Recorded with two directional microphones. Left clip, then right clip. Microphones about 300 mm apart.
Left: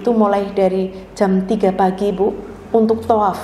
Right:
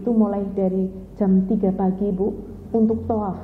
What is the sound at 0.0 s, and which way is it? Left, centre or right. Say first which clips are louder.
A woman's voice: left 7 dB; centre.